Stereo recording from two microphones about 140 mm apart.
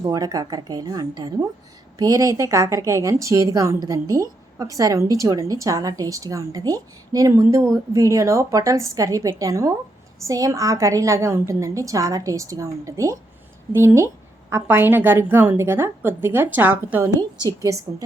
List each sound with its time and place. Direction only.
0.0 s a woman's voice: 25° right (ahead or behind)
17.2 s a woman's voice: 25° right (ahead or behind)